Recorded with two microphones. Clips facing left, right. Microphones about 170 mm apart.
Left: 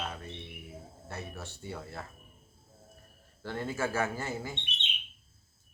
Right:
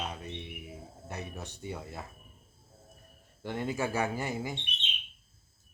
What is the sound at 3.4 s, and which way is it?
Speech, 15° right (ahead or behind).